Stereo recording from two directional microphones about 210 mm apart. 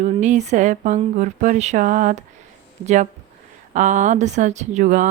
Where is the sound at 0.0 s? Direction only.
35° right (ahead or behind).